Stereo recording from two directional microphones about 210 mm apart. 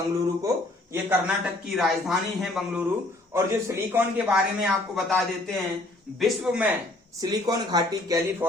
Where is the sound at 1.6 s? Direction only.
Centre (ahead or behind).